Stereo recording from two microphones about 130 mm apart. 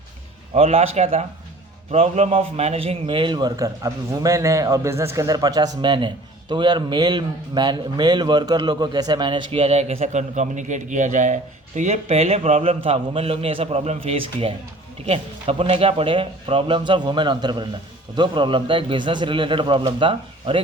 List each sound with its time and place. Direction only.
0.5 s a man's voice: 55° right (ahead or behind)